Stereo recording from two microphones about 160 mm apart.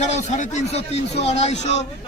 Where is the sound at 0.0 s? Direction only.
50° left (ahead or behind).